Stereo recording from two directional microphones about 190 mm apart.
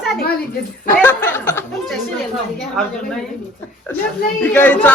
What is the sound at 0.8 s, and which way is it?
Speech, 10° left (ahead or behind).